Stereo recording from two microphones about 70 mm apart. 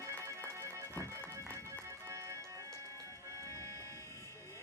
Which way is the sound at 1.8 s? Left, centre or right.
Right.